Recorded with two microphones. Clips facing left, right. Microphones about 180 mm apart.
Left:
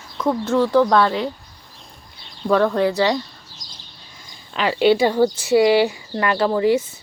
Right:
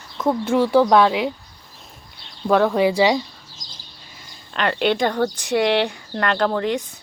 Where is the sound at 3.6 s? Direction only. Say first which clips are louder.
Even; 45° right (ahead or behind).